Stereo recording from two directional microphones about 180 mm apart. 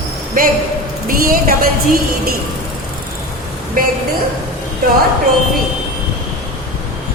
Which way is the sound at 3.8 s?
50° right (ahead or behind).